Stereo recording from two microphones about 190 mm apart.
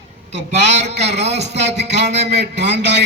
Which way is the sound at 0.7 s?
35° right (ahead or behind).